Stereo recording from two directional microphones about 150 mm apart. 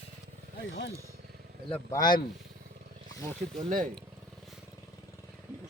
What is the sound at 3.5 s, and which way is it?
Speech, 55° right (ahead or behind).